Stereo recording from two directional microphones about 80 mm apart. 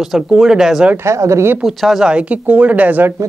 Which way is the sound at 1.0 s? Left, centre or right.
Right.